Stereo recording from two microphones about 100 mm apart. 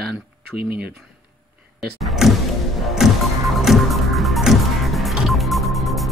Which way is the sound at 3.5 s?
Centre (ahead or behind).